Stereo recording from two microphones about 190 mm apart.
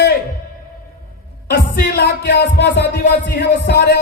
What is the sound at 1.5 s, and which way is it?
Speech, 60° left (ahead or behind).